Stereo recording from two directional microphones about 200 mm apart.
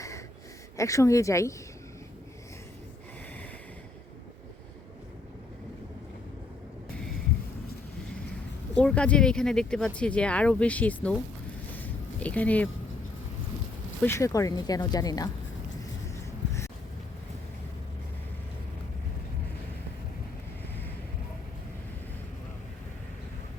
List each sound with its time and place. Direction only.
0.8 s speech: 15° left (ahead or behind)
8.7 s speech: 5° left (ahead or behind)
11.7 s a sound: 10° left (ahead or behind)
14.0 s speech: 15° left (ahead or behind)